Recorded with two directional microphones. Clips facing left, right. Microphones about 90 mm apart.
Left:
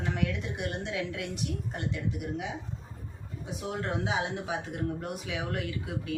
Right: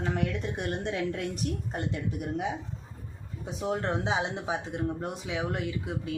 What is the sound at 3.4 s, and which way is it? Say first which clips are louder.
Speech: right 4 dB; 30° right (ahead or behind).